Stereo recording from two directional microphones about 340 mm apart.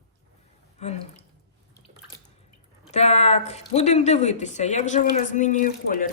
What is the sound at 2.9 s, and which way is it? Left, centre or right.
Speech, centre.